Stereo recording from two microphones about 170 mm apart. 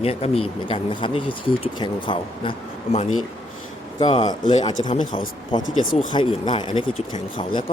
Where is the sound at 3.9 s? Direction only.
30° left (ahead or behind).